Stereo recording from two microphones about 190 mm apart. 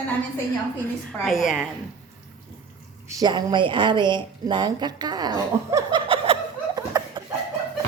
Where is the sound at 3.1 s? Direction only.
20° right (ahead or behind).